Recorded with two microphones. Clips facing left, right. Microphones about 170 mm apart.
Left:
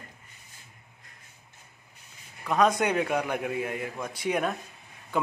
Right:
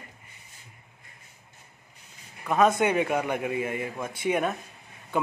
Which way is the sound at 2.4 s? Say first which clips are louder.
Right 2 dB; 5° right (ahead or behind).